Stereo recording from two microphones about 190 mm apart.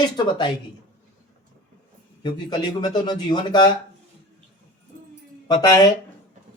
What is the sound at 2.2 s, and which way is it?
Speech, 25° left (ahead or behind).